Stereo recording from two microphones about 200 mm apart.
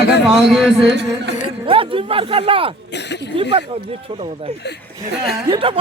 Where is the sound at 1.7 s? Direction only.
25° right (ahead or behind).